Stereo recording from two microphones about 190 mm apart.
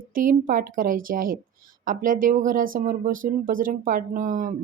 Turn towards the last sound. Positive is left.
turn(degrees=-45)  # may be behind; listen again after turning